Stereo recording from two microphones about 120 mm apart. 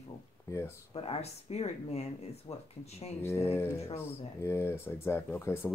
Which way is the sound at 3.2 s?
20° left (ahead or behind).